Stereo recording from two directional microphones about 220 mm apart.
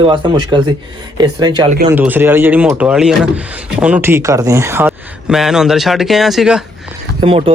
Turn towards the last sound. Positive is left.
turn(degrees=-25)  # may be behind; listen again after turning